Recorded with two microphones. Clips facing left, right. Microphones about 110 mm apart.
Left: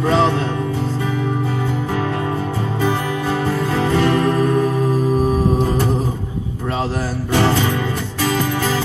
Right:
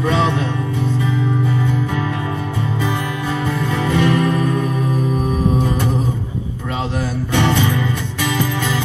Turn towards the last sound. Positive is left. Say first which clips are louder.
# even
turn(degrees=35)  # may be behind; listen again after turning